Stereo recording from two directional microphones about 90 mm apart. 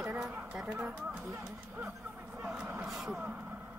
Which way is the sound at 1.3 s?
30° right (ahead or behind).